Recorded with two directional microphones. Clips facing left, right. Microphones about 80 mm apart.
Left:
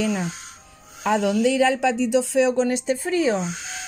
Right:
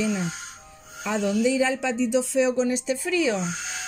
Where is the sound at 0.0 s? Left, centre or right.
Left.